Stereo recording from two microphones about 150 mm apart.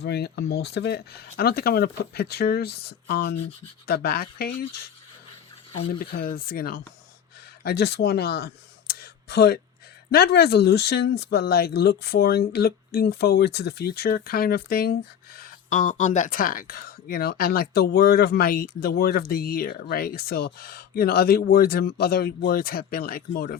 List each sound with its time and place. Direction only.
0.0 s speech: 90° left
6.0 s speech: 75° left (ahead or behind)
19.3 s speech: 75° left (ahead or behind)